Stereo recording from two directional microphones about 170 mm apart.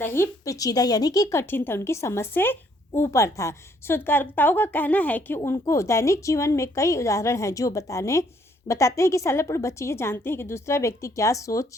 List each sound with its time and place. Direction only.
0.0 s speech: 15° left (ahead or behind)